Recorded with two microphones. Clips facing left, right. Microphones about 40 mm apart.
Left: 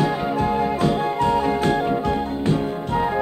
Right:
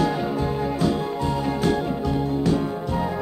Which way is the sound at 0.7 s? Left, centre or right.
Left.